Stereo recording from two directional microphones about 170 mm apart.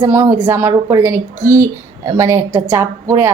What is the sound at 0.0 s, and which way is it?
A woman's voice, 15° right (ahead or behind).